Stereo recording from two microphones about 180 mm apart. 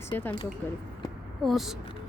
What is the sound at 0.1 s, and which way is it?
Speech, 10° left (ahead or behind).